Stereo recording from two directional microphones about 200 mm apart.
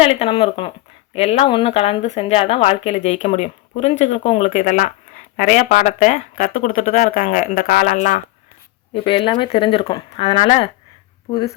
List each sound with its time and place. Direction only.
0.0 s speech: 30° left (ahead or behind)
8.9 s speech: 25° left (ahead or behind)